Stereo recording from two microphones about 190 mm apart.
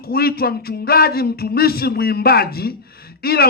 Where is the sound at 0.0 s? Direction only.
55° left (ahead or behind).